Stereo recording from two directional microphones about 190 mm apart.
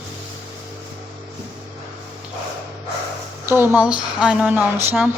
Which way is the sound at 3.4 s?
10° right (ahead or behind).